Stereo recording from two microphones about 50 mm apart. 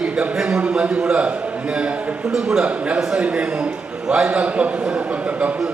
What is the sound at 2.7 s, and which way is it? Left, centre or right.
A man's voice, right.